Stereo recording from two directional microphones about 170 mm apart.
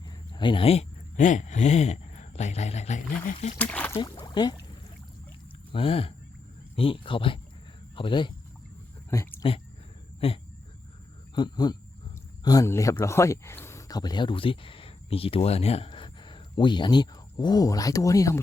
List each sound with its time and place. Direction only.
0.3 s speech: 30° left (ahead or behind)
3.6 s speech: 10° left (ahead or behind)
3.9 s speech: 25° left (ahead or behind)
5.7 s speech: 35° left (ahead or behind)
9.0 s a sound: 15° left (ahead or behind)
10.2 s speech: 35° left (ahead or behind)